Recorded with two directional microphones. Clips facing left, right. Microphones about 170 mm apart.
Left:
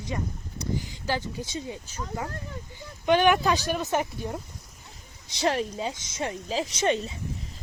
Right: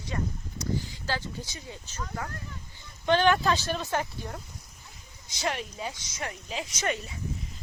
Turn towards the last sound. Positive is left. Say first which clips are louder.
# left 6 dB
turn(degrees=25)  # may be behind; listen again after turning